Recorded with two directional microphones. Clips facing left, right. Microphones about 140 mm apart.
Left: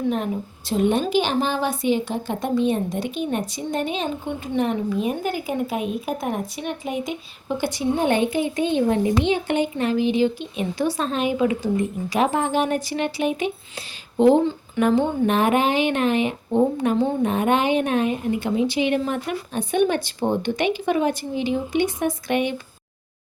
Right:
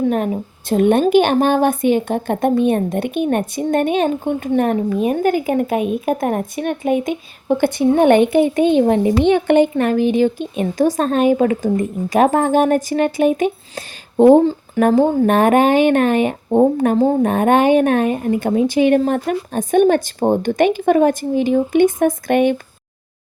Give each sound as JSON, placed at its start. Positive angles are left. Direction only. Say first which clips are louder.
{"t": 0.7, "sound": "a woman's voice", "louder": "right 7 dB", "side_deg": -55}
{"t": 9.2, "sound": "speech", "louder": "right 9 dB", "side_deg": -60}